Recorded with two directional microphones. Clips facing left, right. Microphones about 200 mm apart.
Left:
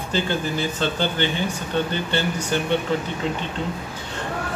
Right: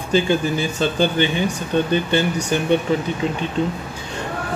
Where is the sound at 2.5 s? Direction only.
15° right (ahead or behind).